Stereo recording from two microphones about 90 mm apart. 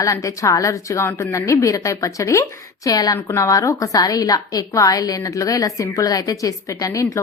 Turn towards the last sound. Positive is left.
turn(degrees=40)  # may be behind; listen again after turning